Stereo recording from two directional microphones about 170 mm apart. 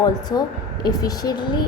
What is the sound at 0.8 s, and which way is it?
Speech, 20° left (ahead or behind).